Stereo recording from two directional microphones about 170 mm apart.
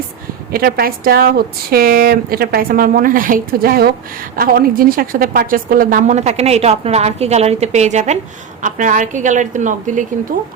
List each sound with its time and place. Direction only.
0.5 s a woman's voice: 60° right (ahead or behind)